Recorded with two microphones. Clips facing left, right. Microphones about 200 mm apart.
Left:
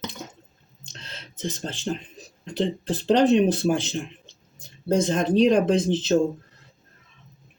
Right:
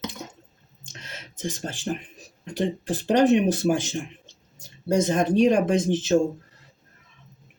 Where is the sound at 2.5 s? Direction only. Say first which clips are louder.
Left 1 dB; 15° right (ahead or behind).